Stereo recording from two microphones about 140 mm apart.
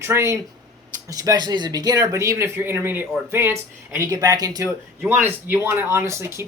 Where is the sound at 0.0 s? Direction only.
20° right (ahead or behind).